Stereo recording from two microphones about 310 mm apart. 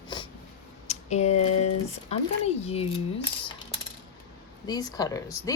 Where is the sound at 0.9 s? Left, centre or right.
Left.